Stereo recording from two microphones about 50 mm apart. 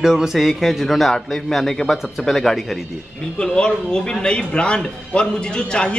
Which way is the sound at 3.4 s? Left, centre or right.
Centre.